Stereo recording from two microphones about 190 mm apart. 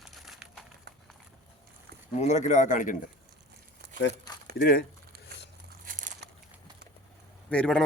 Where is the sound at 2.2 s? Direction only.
40° left (ahead or behind).